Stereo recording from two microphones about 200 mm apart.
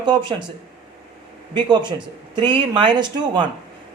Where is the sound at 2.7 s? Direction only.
20° right (ahead or behind).